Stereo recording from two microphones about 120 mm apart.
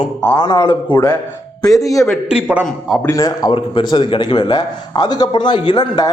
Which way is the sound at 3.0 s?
25° left (ahead or behind).